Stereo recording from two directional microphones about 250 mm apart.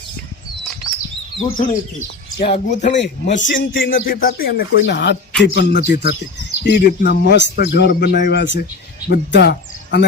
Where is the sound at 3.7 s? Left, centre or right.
Left.